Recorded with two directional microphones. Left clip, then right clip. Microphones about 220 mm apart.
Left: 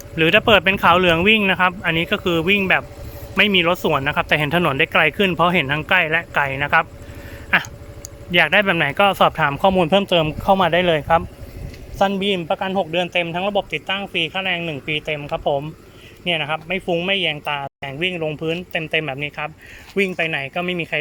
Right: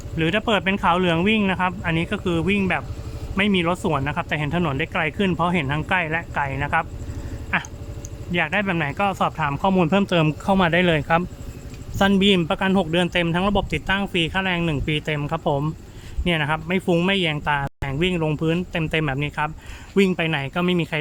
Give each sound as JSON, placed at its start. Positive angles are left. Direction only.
{"t": 0.2, "sound": "speech", "side_deg": 20}
{"t": 8.3, "sound": "speech", "side_deg": 20}
{"t": 9.7, "sound": "speech", "side_deg": 5}
{"t": 11.9, "sound": "a man's voice", "side_deg": -15}